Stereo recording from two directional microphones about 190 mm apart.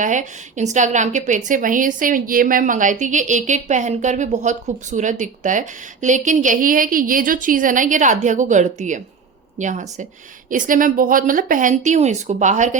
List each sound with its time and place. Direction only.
0.0 s a woman's voice: 40° right (ahead or behind)